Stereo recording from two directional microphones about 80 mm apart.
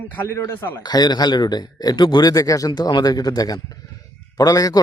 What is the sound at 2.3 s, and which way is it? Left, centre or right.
Speech, left.